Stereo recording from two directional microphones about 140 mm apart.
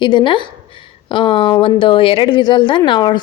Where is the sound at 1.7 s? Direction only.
35° left (ahead or behind).